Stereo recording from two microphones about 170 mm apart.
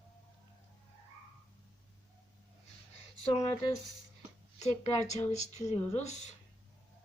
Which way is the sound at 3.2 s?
35° left (ahead or behind).